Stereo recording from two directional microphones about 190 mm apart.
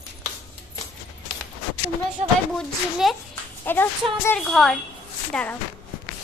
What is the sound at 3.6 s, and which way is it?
A woman's voice, 10° left (ahead or behind).